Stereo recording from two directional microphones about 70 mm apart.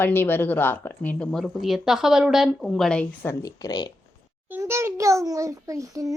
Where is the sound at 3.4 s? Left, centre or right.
Left.